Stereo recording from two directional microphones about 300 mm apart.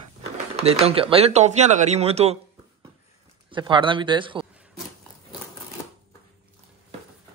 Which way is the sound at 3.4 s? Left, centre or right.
Centre.